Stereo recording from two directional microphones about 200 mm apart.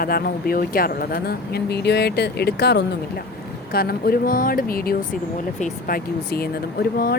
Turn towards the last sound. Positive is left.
turn(degrees=50)  # may be behind; listen again after turning